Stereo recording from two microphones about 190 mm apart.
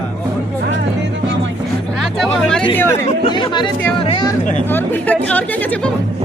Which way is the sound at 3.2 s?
25° left (ahead or behind).